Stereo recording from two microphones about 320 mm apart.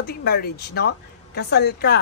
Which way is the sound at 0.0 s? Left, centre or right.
Left.